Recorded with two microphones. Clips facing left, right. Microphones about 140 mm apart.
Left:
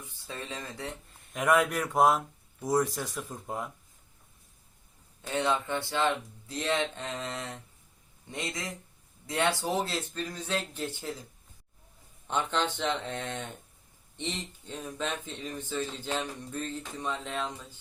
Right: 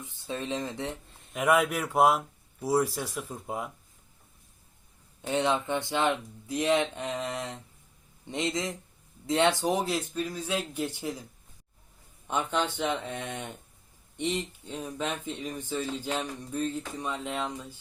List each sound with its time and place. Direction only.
0.0 s speech: 20° right (ahead or behind)
1.3 s speech: 5° right (ahead or behind)
5.2 s speech: 20° right (ahead or behind)
12.3 s speech: 10° right (ahead or behind)